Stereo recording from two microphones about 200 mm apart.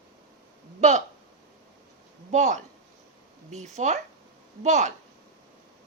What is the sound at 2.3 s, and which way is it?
Speech, 35° right (ahead or behind).